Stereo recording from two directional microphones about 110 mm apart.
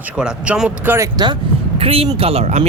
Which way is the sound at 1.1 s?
40° right (ahead or behind).